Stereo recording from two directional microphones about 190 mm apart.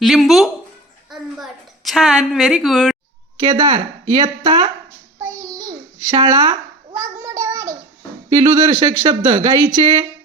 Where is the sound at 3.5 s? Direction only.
15° right (ahead or behind).